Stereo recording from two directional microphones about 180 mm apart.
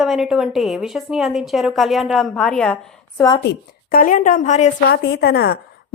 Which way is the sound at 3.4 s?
60° left (ahead or behind).